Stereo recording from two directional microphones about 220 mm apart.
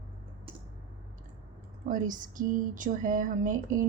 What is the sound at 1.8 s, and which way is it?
A woman's voice, 35° right (ahead or behind).